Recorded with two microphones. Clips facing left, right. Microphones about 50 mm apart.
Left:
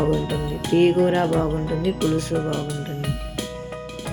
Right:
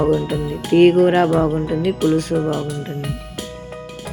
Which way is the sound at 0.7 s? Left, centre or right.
Right.